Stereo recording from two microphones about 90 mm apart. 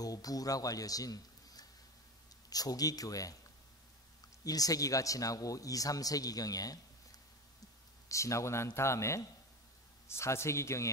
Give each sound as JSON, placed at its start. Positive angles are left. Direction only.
{"t": 0.0, "sound": "speech", "side_deg": 45}
{"t": 4.5, "sound": "speech", "side_deg": 40}